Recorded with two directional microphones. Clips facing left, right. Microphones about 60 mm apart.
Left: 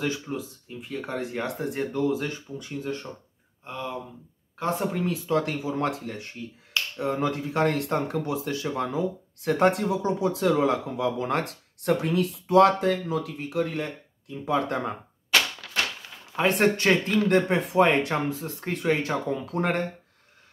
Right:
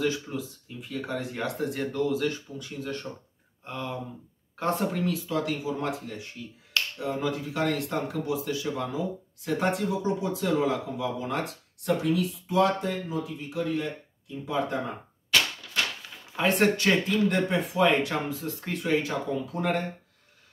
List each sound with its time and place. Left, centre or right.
0.0 s speech: left
3.6 s speech: centre
5.3 s speech: left
5.8 s speech: left
7.0 s speech: left
9.8 s speech: left
16.3 s speech: left